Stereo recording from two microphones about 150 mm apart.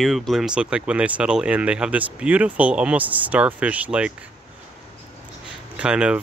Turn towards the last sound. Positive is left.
turn(degrees=-5)  # may be behind; listen again after turning